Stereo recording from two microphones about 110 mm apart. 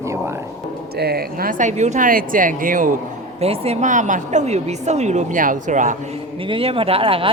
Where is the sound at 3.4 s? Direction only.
70° right (ahead or behind); by 5.8 s 90° right.